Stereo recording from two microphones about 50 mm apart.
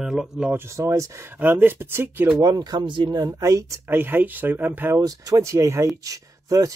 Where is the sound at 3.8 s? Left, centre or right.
Right.